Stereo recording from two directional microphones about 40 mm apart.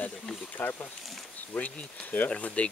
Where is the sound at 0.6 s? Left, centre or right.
Left.